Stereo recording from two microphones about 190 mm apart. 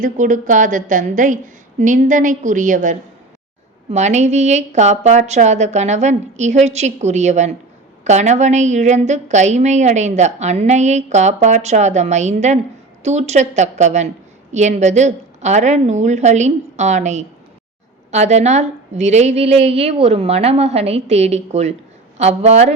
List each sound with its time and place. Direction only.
0.0 s a woman's voice: 40° right (ahead or behind)